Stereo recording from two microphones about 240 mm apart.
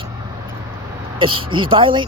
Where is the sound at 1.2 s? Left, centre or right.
Right.